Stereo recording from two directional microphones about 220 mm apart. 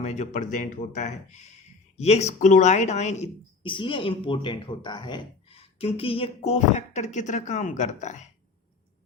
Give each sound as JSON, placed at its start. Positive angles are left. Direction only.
{"t": 0.0, "sound": "speech", "side_deg": 30}